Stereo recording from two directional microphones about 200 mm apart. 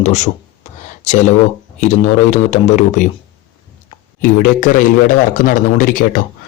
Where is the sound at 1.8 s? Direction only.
35° left (ahead or behind).